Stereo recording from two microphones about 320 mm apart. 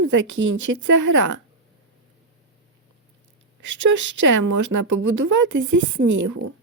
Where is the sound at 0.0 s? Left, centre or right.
Right.